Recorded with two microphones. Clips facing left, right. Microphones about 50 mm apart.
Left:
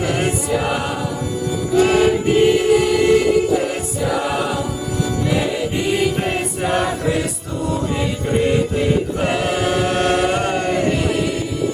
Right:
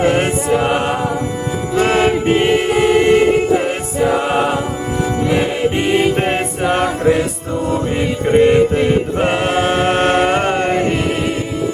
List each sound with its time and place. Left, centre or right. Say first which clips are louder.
0.0 s choir: right 5 dB; right
1.7 s music: even; right
8.3 s choir: right 8 dB; right